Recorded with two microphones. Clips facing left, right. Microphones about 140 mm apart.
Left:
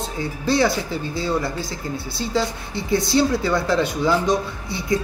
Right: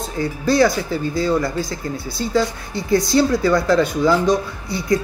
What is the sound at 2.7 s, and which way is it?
Speech, 25° left (ahead or behind).